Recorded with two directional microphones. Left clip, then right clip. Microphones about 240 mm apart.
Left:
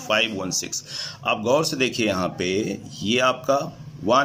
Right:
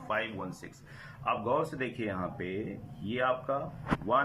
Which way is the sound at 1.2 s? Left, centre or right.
Left.